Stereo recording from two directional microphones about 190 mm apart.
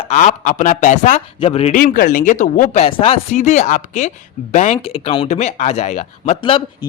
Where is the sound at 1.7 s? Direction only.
50° left (ahead or behind).